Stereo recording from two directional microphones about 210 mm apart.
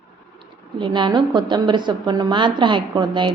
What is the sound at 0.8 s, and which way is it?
A woman's voice, 20° right (ahead or behind).